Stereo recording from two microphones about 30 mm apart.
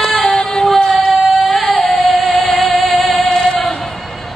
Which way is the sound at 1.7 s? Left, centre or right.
Left.